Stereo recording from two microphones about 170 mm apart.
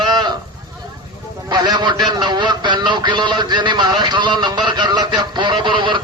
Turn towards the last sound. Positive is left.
turn(degrees=-30)  # may be behind; listen again after turning